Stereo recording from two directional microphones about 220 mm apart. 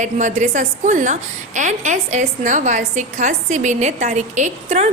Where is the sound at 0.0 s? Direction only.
35° right (ahead or behind).